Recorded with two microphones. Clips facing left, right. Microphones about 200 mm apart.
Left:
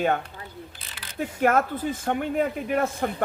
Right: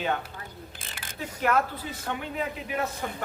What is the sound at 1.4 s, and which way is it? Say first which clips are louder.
A man's voice: left 4 dB; 50° left (ahead or behind).